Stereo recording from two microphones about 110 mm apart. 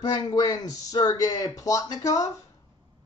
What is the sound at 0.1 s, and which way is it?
Speech, 40° left (ahead or behind).